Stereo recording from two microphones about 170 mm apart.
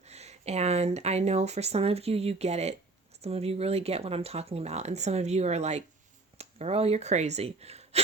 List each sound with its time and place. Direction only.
0.1 s speech: 40° right (ahead or behind)